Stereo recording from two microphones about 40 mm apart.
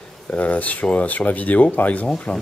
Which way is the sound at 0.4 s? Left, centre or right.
Left.